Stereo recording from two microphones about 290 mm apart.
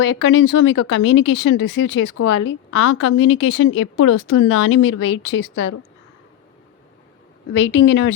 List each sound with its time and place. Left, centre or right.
0.0 s speech: left
7.8 s speech: left